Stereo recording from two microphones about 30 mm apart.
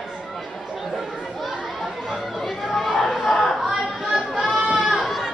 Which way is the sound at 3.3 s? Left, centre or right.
Centre.